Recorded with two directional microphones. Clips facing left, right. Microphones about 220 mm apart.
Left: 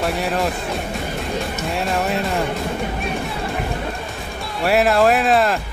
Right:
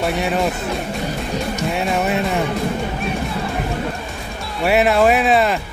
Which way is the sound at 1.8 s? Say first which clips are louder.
Right 1 dB; centre (ahead or behind).